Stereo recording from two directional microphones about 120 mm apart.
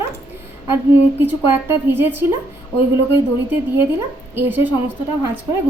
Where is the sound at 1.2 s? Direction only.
15° right (ahead or behind).